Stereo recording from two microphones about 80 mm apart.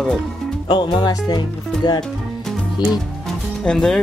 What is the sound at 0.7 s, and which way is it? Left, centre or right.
Speech, left.